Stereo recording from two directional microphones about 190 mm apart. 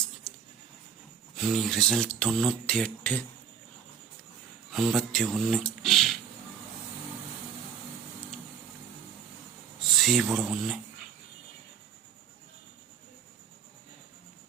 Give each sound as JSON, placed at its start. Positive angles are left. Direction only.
{"t": 1.4, "sound": "speech", "side_deg": 0}
{"t": 4.7, "sound": "speech", "side_deg": 0}
{"t": 9.8, "sound": "speech", "side_deg": 0}